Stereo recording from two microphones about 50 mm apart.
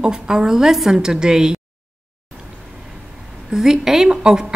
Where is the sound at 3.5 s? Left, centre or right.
Centre.